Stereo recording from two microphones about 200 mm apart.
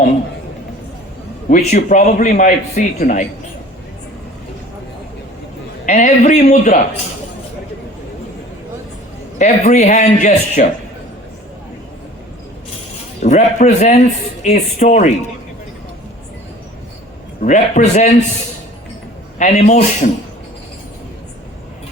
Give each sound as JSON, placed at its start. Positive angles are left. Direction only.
{"t": 1.5, "sound": "speech", "side_deg": 40}
{"t": 5.8, "sound": "speech", "side_deg": 40}
{"t": 9.4, "sound": "speech", "side_deg": 35}
{"t": 13.2, "sound": "speech", "side_deg": 35}
{"t": 17.4, "sound": "speech", "side_deg": 40}
{"t": 19.4, "sound": "speech", "side_deg": 35}